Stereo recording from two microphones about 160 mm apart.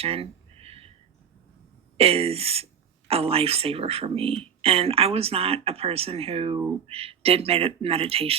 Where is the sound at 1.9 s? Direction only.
40° right (ahead or behind).